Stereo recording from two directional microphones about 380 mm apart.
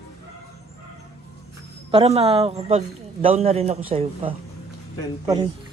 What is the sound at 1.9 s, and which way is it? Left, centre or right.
A man's voice, centre.